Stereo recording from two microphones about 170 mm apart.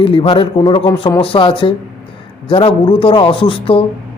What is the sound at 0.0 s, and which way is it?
A man's voice, 30° left (ahead or behind).